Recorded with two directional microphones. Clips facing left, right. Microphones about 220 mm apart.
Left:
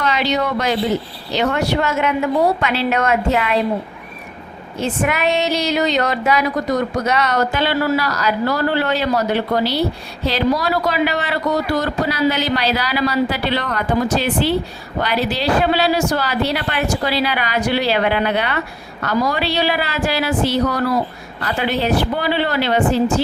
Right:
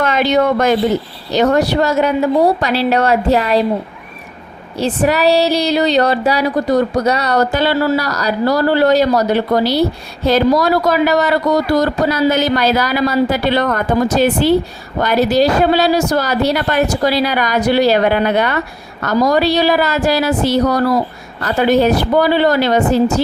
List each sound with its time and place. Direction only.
0.0 s speech: 50° right (ahead or behind)
1.3 s female singing: 40° right (ahead or behind)
4.8 s female singing: 35° right (ahead or behind)
10.2 s speech: 45° right (ahead or behind)
19.0 s female singing: 40° right (ahead or behind)